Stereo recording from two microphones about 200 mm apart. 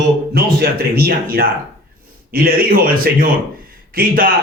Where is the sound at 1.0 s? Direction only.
50° right (ahead or behind).